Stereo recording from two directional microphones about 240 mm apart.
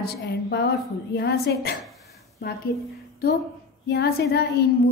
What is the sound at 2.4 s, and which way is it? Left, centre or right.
Speech, left.